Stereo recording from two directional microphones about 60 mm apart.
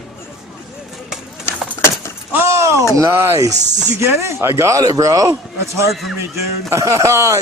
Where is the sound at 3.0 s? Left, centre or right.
Right.